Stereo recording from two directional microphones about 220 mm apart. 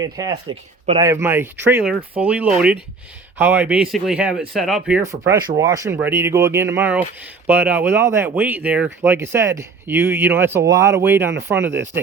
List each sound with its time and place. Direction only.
0.0 s speech: 15° right (ahead or behind)